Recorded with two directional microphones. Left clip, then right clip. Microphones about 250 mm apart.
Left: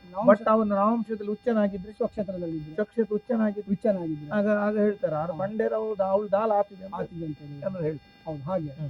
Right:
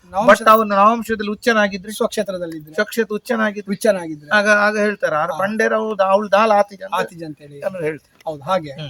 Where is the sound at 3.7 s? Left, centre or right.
Centre.